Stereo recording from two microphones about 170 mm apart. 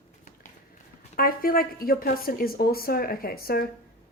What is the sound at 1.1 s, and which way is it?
A woman's voice, 60° left (ahead or behind).